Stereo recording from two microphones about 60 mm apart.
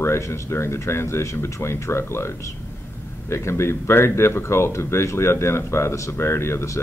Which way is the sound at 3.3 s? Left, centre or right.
Left.